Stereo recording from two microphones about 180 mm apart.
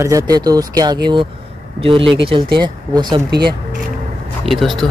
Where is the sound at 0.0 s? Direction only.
20° right (ahead or behind).